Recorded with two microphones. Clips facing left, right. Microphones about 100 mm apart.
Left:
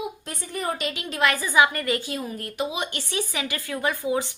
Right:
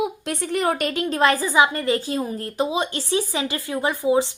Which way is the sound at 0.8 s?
45° right (ahead or behind).